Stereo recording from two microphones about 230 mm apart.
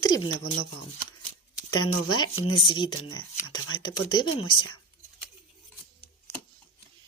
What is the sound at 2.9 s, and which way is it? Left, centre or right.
Speech, left.